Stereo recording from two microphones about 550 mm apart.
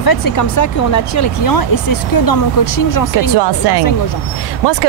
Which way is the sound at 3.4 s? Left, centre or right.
Right.